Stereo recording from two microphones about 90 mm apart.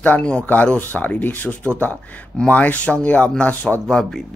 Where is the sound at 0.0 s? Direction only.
15° left (ahead or behind).